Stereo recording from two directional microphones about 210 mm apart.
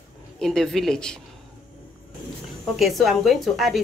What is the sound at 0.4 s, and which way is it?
Speech, 5° left (ahead or behind).